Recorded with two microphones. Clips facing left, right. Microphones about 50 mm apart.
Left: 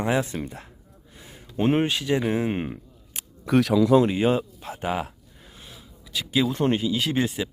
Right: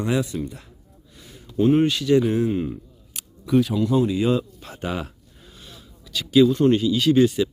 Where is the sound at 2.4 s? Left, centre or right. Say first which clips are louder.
Right 4 dB; left.